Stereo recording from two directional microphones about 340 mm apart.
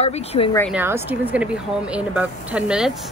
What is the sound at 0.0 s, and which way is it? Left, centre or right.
Speech, centre.